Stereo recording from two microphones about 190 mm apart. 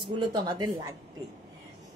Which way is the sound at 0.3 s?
20° right (ahead or behind).